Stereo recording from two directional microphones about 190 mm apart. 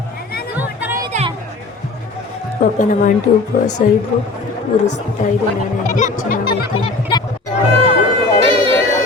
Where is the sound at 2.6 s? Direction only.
40° left (ahead or behind).